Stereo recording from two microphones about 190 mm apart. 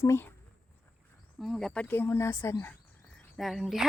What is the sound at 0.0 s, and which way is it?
Speech, 10° left (ahead or behind).